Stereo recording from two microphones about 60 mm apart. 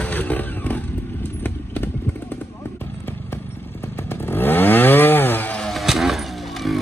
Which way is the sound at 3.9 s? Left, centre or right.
Left.